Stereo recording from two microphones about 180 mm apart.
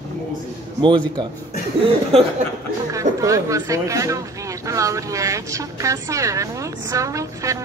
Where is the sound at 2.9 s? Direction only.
15° right (ahead or behind).